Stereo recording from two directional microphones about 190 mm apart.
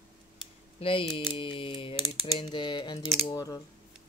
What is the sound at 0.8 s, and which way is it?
Typing, 25° left (ahead or behind).